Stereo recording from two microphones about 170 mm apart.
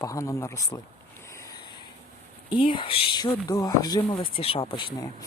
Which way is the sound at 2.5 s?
30° left (ahead or behind).